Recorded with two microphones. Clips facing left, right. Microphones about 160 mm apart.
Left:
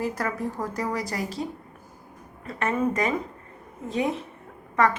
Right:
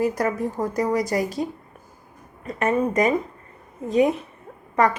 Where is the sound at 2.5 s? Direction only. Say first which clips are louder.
Right 3 dB; 15° right (ahead or behind).